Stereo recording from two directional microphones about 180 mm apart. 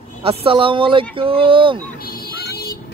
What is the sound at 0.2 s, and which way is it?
Speech, 30° right (ahead or behind).